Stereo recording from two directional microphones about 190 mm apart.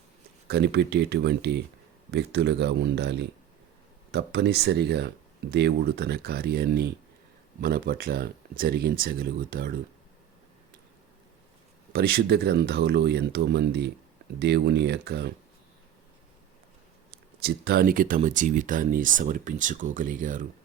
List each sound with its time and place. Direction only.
0.4 s speech: 60° right (ahead or behind)
11.9 s speech: 55° right (ahead or behind)
17.4 s speech: 55° right (ahead or behind)